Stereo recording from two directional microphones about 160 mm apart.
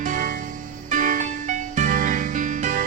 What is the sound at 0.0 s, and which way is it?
Music, 50° right (ahead or behind).